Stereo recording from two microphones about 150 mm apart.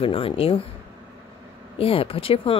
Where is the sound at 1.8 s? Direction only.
40° left (ahead or behind).